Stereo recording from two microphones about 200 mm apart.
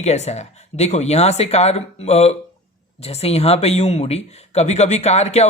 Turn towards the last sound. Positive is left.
turn(degrees=35)  # may be behind; listen again after turning